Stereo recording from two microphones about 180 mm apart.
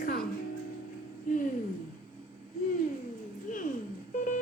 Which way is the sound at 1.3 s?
45° left (ahead or behind).